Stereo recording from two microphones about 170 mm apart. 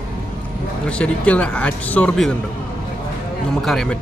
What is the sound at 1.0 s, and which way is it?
Speech, 5° left (ahead or behind).